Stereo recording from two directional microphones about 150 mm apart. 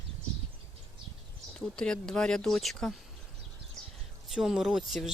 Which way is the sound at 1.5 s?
5° left (ahead or behind).